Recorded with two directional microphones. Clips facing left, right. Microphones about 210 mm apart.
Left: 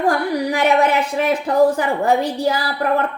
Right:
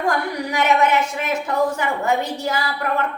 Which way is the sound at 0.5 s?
35° left (ahead or behind).